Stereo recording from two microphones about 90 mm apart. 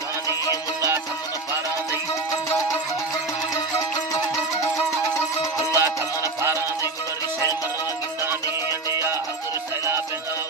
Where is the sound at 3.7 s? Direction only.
40° left (ahead or behind).